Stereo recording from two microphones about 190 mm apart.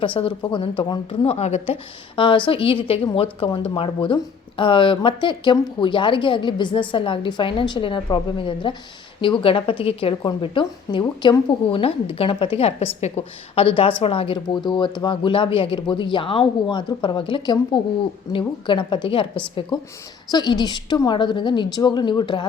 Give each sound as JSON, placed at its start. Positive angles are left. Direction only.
{"t": 0.0, "sound": "a woman's voice", "side_deg": 25}